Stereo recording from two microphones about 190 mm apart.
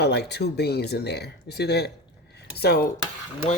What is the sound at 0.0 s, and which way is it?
Speech, 60° left (ahead or behind).